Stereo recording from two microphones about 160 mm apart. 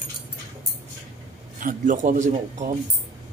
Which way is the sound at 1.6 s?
55° right (ahead or behind).